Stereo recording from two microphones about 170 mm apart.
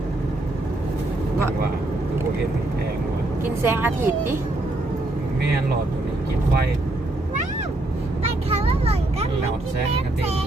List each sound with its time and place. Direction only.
3.6 s speech: 15° right (ahead or behind)
8.4 s vehicle: 35° right (ahead or behind)